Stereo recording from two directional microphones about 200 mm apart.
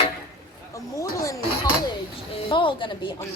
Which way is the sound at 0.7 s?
15° left (ahead or behind).